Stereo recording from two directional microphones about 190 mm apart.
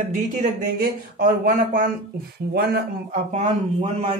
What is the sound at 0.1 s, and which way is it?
Speech, 40° right (ahead or behind).